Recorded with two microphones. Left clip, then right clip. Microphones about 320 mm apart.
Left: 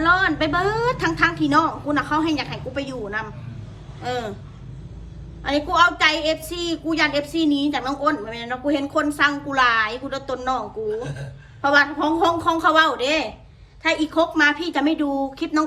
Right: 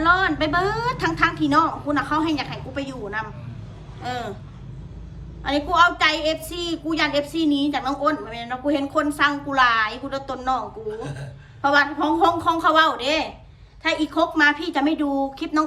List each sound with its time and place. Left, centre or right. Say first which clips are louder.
0.0 s a woman's voice: left 1 dB; centre
5.4 s a woman's voice: even; centre